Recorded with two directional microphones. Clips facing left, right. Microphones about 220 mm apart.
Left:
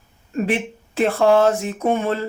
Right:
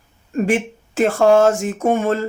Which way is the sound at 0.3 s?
45° right (ahead or behind).